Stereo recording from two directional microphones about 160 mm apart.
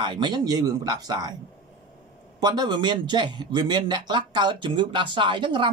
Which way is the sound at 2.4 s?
25° right (ahead or behind).